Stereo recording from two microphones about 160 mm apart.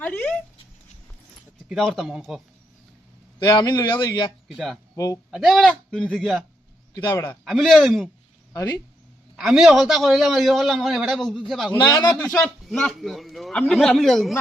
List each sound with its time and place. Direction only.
0.0 s a sound: 10° left (ahead or behind)
1.7 s a man's voice: centre (ahead or behind)
3.4 s speech: 25° left (ahead or behind)
4.4 s speech: centre (ahead or behind)
4.9 s speech: 20° left (ahead or behind)
5.3 s a man's voice: centre (ahead or behind)
6.9 s speech: 20° left (ahead or behind)
7.4 s a man's voice: centre (ahead or behind)
9.3 s a man's voice: centre (ahead or behind)
11.8 s speech: 25° left (ahead or behind)
12.1 s a man's voice: 5° left (ahead or behind)